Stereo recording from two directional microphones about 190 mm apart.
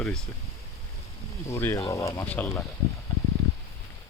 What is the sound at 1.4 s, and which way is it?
Speech, 15° left (ahead or behind).